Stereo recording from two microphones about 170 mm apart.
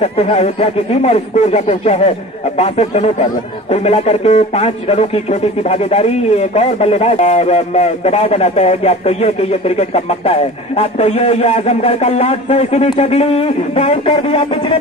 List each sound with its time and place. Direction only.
0.0 s speech: 35° left (ahead or behind)